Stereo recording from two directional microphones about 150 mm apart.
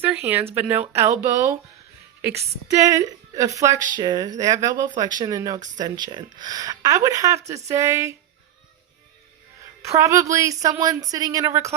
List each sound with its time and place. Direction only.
0.0 s a woman's voice: 10° right (ahead or behind)
9.8 s a woman's voice: 20° right (ahead or behind)